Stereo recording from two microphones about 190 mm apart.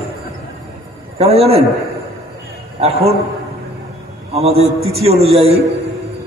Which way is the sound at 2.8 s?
30° right (ahead or behind).